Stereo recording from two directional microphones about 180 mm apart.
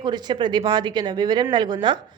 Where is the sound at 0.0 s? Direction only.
25° right (ahead or behind).